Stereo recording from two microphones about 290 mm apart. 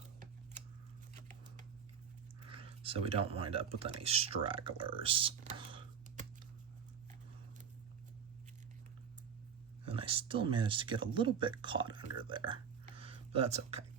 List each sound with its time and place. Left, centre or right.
2.5 s speech: centre
9.8 s speech: centre
12.3 s a sound: centre